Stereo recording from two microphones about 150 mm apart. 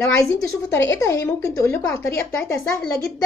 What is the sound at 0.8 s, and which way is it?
A woman's voice, 20° left (ahead or behind).